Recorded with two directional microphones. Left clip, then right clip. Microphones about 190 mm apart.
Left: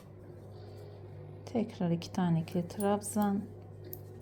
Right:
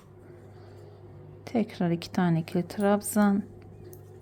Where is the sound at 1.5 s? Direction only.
20° right (ahead or behind).